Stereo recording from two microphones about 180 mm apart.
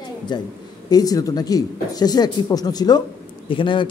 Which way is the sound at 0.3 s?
25° left (ahead or behind).